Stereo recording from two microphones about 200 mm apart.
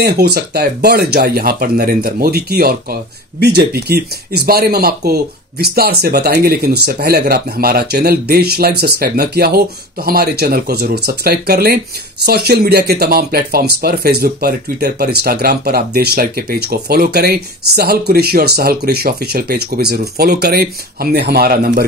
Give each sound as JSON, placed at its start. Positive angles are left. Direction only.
{"t": 0.0, "sound": "speech", "side_deg": -55}